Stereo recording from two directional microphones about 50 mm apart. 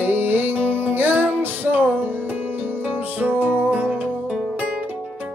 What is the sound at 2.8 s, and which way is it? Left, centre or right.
Music, right.